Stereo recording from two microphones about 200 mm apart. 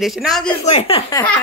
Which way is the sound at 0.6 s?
30° left (ahead or behind).